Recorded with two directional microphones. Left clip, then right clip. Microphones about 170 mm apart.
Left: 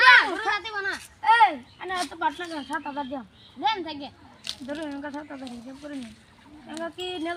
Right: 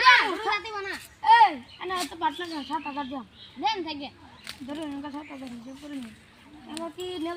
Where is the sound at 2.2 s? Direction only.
5° left (ahead or behind).